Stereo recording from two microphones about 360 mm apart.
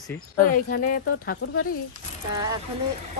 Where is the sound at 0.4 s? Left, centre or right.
Left.